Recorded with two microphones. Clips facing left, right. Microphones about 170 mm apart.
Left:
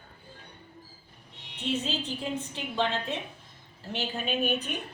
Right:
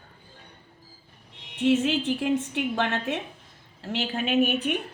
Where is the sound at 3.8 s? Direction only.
90° right.